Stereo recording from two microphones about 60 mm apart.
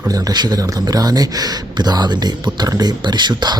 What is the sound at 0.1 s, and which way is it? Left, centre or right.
Speech, right.